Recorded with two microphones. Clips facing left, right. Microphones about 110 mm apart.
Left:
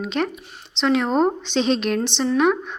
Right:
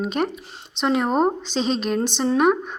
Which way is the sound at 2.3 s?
45° right (ahead or behind).